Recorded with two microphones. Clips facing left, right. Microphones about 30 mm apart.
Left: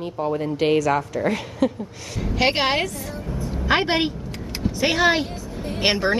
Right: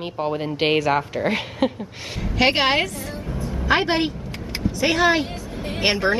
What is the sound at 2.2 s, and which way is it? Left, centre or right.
Speech, centre.